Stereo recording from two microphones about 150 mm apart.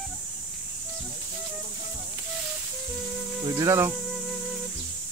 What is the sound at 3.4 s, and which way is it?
Speech, 20° right (ahead or behind).